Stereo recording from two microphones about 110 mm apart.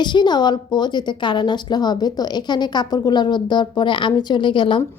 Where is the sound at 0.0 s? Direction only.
45° left (ahead or behind).